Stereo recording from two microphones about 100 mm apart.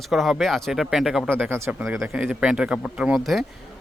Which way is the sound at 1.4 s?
25° right (ahead or behind).